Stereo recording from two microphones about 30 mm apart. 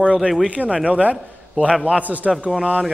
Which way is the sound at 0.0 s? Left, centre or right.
Right.